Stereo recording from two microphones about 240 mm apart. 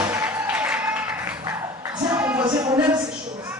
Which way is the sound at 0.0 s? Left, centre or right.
Centre.